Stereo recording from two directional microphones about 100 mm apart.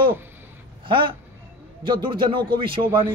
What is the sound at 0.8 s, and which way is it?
Speech, 55° right (ahead or behind).